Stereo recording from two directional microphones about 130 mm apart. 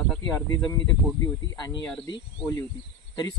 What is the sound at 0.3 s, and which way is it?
Speech, 30° left (ahead or behind).